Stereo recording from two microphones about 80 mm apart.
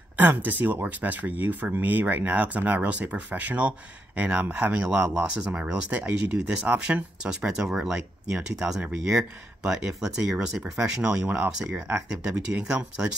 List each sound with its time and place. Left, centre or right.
0.2 s speech: right